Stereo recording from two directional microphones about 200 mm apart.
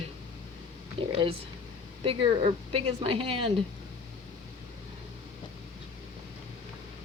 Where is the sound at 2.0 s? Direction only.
25° right (ahead or behind).